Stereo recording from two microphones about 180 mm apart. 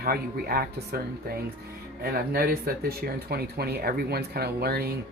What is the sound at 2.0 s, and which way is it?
Speech, 55° right (ahead or behind).